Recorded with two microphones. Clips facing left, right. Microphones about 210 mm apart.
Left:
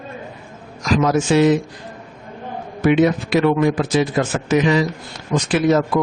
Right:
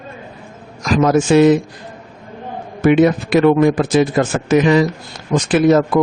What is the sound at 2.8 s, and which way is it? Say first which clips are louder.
A man's voice: right 3 dB; 50° right (ahead or behind).